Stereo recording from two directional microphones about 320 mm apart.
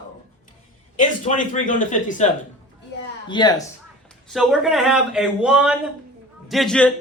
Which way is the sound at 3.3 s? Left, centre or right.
Centre.